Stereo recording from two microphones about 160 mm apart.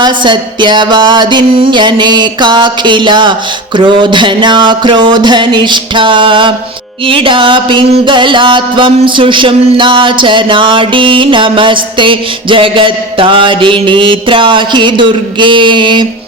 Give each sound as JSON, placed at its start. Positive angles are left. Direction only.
{"t": 0.0, "sound": "music", "side_deg": -30}